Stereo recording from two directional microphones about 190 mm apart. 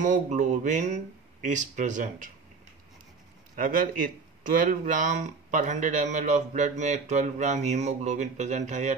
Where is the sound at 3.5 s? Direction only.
45° right (ahead or behind).